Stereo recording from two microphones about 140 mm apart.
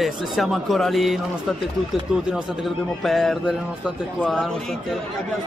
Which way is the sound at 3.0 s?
Centre (ahead or behind).